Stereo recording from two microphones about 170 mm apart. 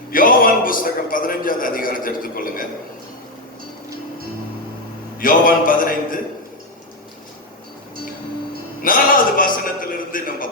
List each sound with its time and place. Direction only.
0.1 s a man's voice: 55° left (ahead or behind)
5.1 s a man's voice: 55° left (ahead or behind)
8.8 s a sound: 55° left (ahead or behind)